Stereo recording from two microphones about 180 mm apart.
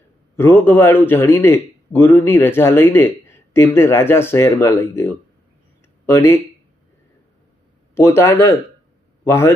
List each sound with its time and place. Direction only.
0.3 s a man's voice: 15° left (ahead or behind)
7.9 s a man's voice: 15° left (ahead or behind)